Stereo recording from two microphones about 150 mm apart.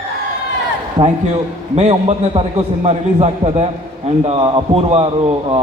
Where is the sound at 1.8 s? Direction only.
45° right (ahead or behind).